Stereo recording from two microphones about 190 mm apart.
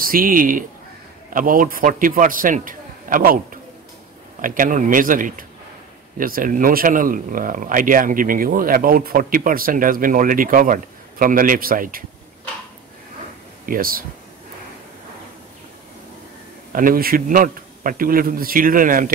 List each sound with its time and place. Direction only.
0.0 s speech: 50° right (ahead or behind)
4.4 s speech: 45° right (ahead or behind)
13.7 s speech: 50° right (ahead or behind)
16.7 s speech: 50° right (ahead or behind)